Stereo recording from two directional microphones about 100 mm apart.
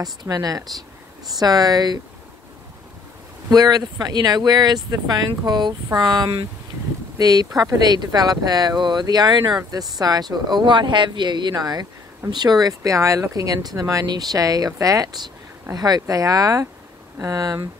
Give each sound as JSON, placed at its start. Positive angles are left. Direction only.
{"t": 0.0, "sound": "speech", "side_deg": -40}
{"t": 3.4, "sound": "speech", "side_deg": -40}